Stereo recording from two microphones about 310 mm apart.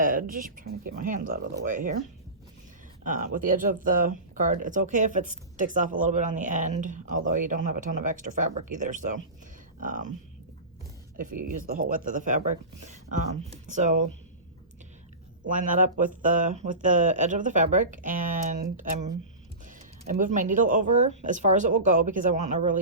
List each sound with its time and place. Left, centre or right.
0.0 s speech: right
3.0 s speech: right
11.2 s speech: right
12.9 s a sound: right
13.7 s speech: right
15.4 s speech: right
20.1 s speech: right